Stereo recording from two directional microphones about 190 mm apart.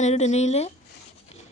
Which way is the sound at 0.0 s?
35° left (ahead or behind).